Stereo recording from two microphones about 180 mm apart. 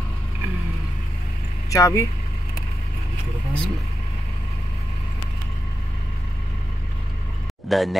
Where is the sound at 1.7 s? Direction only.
20° left (ahead or behind).